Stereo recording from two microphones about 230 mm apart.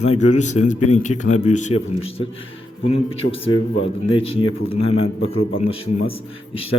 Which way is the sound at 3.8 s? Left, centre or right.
Left.